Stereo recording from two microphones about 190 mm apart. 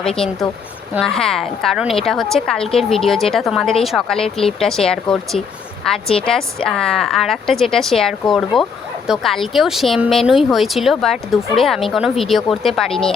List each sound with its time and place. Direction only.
0.2 s speech: centre (ahead or behind)